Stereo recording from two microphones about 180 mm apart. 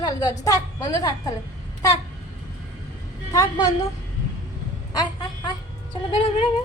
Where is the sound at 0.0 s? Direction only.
20° left (ahead or behind).